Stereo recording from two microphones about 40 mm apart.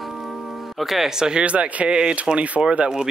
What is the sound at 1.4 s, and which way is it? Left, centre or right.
Speech, right.